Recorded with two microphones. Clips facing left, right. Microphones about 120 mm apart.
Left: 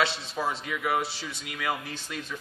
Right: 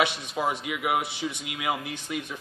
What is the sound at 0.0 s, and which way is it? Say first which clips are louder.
A man's voice: right 2 dB; 15° right (ahead or behind).